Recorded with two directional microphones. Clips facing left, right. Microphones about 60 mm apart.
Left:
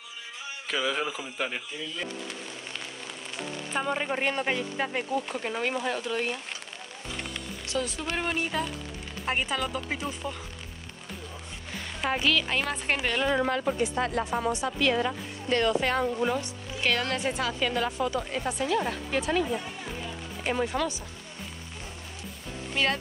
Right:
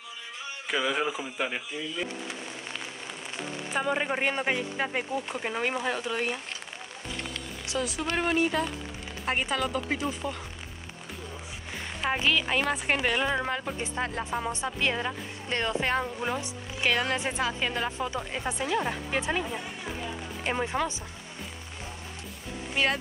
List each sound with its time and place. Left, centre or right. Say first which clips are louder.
0.7 s speech: right 1 dB; centre
3.7 s speech: right 1 dB; centre
7.6 s speech: right 1 dB; centre
12.0 s speech: even; centre
16.0 s speech: left 4 dB; centre
22.8 s speech: even; centre